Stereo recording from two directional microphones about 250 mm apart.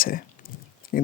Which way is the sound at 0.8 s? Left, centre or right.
Left.